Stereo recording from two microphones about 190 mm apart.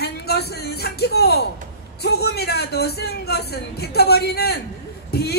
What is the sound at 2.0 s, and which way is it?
Speech, 60° left (ahead or behind).